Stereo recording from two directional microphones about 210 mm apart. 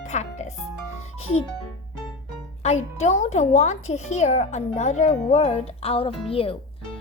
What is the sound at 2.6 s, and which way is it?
A child's voice, 30° left (ahead or behind).